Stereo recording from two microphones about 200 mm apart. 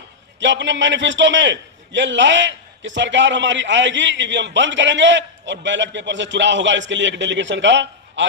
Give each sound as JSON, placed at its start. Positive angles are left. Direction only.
{"t": 0.3, "sound": "a man's voice", "side_deg": -65}